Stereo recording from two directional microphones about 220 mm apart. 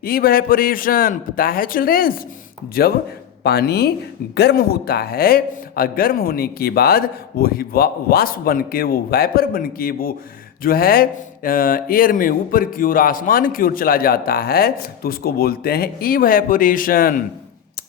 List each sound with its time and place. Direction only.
0.0 s speech: 40° left (ahead or behind)
3.4 s speech: 45° left (ahead or behind)